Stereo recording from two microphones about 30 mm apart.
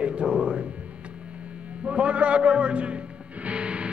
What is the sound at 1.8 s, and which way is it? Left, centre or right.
Music, right.